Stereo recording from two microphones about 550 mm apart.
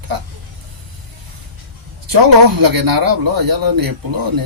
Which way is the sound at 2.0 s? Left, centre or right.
Right.